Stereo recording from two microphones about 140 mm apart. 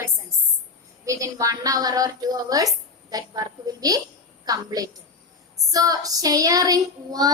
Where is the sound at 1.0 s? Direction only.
25° right (ahead or behind).